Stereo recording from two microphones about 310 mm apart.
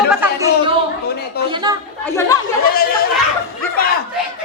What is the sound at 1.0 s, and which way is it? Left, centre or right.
Speech, left.